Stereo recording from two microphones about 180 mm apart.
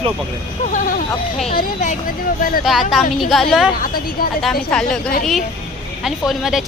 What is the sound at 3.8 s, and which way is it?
Speech, 55° left (ahead or behind).